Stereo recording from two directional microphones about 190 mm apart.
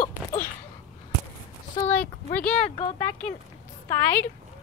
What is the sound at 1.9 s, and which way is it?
Speech, 10° left (ahead or behind).